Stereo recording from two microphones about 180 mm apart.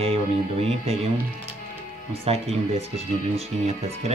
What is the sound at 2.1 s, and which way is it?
Speech, 35° right (ahead or behind).